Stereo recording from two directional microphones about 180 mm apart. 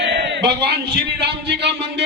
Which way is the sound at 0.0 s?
70° right (ahead or behind).